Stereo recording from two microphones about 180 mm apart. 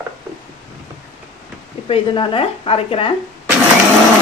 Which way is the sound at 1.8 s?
30° left (ahead or behind).